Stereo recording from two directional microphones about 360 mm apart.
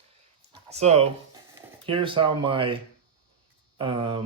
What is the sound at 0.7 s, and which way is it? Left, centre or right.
Speech, centre.